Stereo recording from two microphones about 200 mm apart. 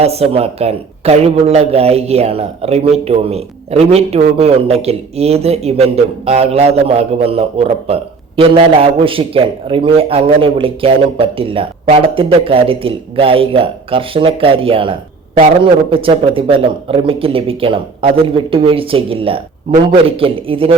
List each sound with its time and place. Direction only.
0.0 s speech: 30° right (ahead or behind)